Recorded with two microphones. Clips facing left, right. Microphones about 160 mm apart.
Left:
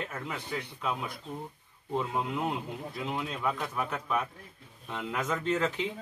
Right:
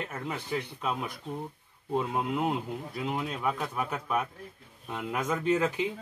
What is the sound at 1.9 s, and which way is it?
Speech, 10° right (ahead or behind).